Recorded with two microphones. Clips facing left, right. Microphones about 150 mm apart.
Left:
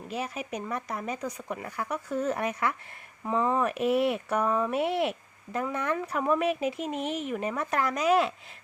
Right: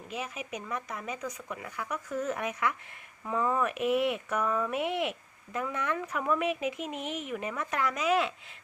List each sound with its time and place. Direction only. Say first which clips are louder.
0.1 s speech: left 4 dB; 35° left (ahead or behind)
3.2 s speech: left 3 dB; 25° left (ahead or behind)